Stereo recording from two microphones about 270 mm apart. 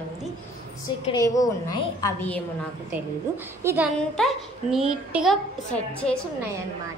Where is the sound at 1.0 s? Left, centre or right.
Centre.